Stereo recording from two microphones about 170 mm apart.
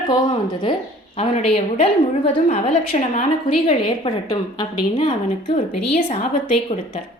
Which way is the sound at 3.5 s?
30° left (ahead or behind).